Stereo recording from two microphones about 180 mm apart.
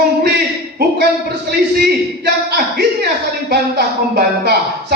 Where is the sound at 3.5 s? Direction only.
60° right (ahead or behind).